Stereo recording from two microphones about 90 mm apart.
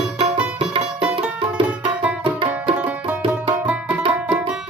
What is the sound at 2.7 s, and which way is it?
Music, 15° right (ahead or behind).